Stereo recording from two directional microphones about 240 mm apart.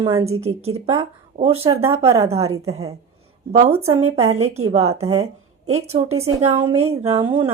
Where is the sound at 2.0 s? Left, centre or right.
Centre.